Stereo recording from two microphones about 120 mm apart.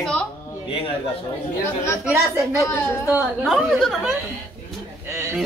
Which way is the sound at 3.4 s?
Centre (ahead or behind).